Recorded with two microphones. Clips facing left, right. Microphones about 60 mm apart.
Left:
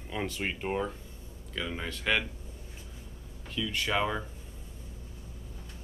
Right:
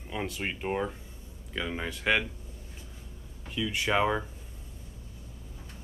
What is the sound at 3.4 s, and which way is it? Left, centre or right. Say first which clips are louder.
Speech: right 2 dB; centre.